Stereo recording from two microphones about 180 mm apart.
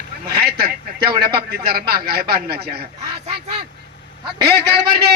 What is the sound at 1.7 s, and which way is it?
A man's voice, 60° right (ahead or behind).